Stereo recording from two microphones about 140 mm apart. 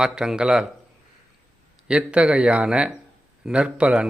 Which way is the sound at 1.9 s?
10° right (ahead or behind).